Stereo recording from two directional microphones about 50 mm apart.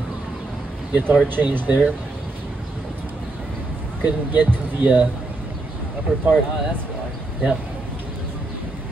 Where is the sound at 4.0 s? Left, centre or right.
Right.